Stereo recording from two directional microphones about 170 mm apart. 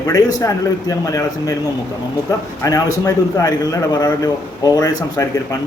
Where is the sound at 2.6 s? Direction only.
20° left (ahead or behind).